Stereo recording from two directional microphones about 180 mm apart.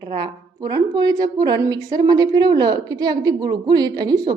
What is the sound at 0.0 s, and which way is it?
A woman's voice, 25° right (ahead or behind).